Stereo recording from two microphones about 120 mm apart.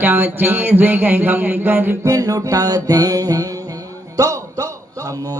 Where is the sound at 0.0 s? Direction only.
15° right (ahead or behind).